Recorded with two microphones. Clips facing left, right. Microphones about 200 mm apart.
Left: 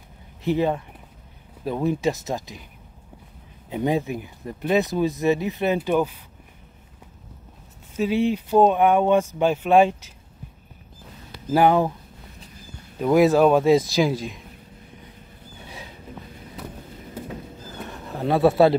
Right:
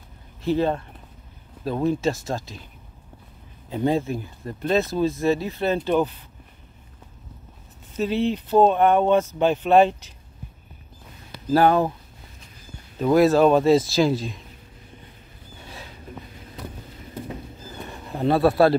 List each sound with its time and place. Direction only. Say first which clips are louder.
0.4 s speech: even; 15° left (ahead or behind)
1.9 s speech: even; 15° left (ahead or behind)
3.7 s speech: right 1 dB; 15° left (ahead or behind)
7.9 s speech: left 1 dB; 10° left (ahead or behind)
11.5 s speech: even; 15° left (ahead or behind)
13.0 s speech: even; 15° left (ahead or behind)
18.2 s a man's voice: left 1 dB; 15° left (ahead or behind)